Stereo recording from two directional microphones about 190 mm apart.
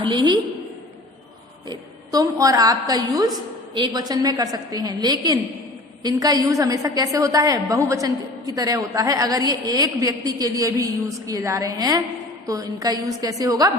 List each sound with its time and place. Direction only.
0.0 s a woman's voice: 25° right (ahead or behind)
1.7 s a woman's voice: 20° right (ahead or behind)